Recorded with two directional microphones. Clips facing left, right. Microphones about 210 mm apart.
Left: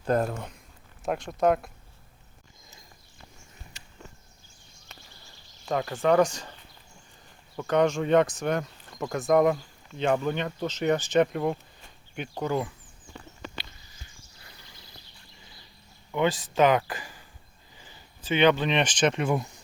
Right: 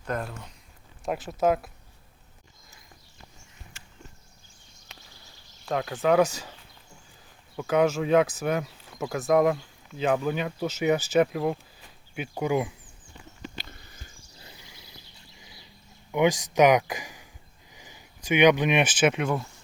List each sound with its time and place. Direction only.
0.0 s speech: 35° left (ahead or behind)
0.3 s speech: 50° left (ahead or behind)
1.0 s speech: 5° right (ahead or behind)
4.9 s a sound: centre (ahead or behind)
5.6 s speech: centre (ahead or behind)
13.6 s a sound: 55° right (ahead or behind)
14.3 s a sound: 20° right (ahead or behind)
16.1 s speech: 15° right (ahead or behind)
19.3 s speech: 15° left (ahead or behind)